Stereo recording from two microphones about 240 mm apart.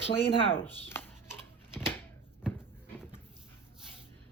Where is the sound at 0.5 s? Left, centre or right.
Centre.